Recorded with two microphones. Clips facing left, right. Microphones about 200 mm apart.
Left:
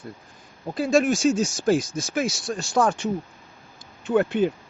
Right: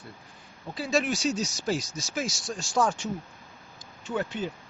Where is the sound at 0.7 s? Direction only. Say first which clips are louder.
Left 7 dB; 50° left (ahead or behind).